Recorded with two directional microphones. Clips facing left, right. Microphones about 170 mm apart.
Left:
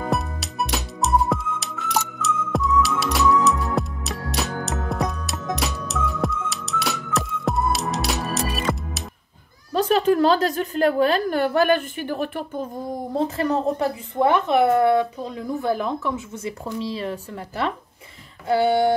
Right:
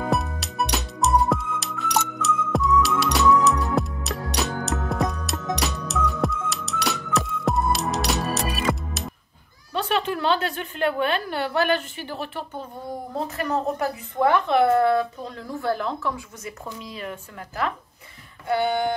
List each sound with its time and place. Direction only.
0.0 s music: centre (ahead or behind)
9.8 s a woman's voice: 40° left (ahead or behind)
13.1 s speech: 30° left (ahead or behind)
18.5 s a sound: 30° left (ahead or behind)